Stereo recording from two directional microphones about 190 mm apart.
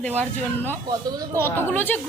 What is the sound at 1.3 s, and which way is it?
Speech, 10° left (ahead or behind).